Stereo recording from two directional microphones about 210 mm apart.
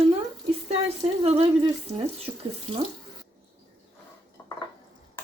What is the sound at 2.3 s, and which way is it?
Speech, 20° right (ahead or behind).